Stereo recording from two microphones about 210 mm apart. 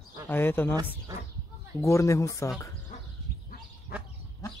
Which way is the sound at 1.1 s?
15° right (ahead or behind).